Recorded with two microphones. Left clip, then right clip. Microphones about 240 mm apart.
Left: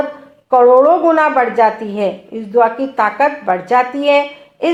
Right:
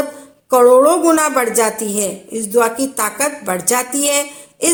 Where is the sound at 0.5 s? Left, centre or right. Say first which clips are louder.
Left 1 dB; right.